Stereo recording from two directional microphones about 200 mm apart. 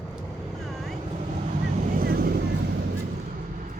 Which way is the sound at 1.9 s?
50° right (ahead or behind).